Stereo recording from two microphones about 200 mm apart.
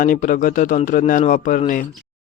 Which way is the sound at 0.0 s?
40° left (ahead or behind).